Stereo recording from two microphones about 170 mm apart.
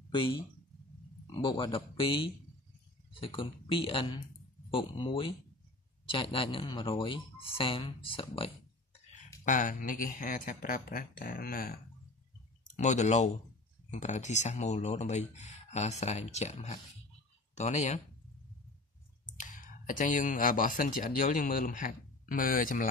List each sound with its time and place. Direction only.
0.1 s speech: 30° left (ahead or behind)
9.4 s speech: 50° left (ahead or behind)
12.7 s speech: 45° left (ahead or behind)
19.3 s speech: 50° left (ahead or behind)